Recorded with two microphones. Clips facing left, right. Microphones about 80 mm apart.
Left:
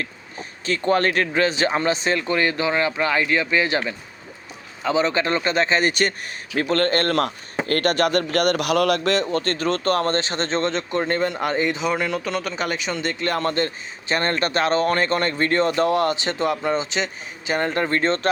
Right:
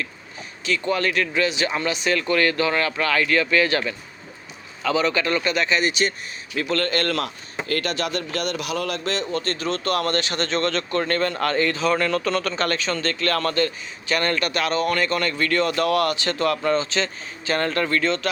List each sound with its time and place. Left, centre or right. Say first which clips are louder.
0.6 s speech: left 3 dB; left
5.9 s a man's voice: left 1 dB; left
9.3 s speech: left 3 dB; left